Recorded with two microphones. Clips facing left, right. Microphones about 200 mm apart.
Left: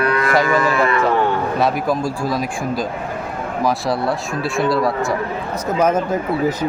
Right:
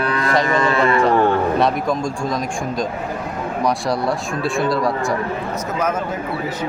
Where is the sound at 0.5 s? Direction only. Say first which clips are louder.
Even; 25° right (ahead or behind).